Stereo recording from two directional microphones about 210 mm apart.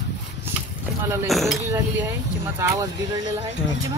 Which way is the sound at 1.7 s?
15° right (ahead or behind).